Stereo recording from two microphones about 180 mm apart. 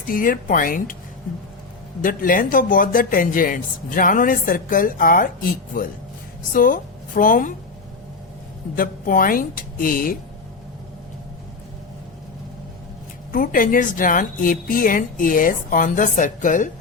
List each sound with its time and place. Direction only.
0.1 s speech: 50° left (ahead or behind)
2.0 s speech: 50° left (ahead or behind)
8.7 s speech: 50° left (ahead or behind)
13.3 s speech: 50° left (ahead or behind)